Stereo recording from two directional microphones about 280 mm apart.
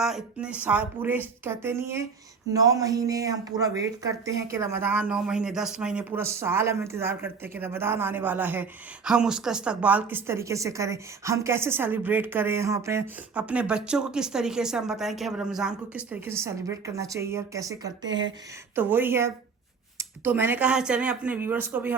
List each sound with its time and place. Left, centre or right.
0.0 s speech: centre
18.1 s speech: right
18.8 s speech: centre